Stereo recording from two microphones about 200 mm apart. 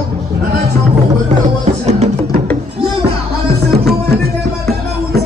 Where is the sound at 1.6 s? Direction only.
35° right (ahead or behind).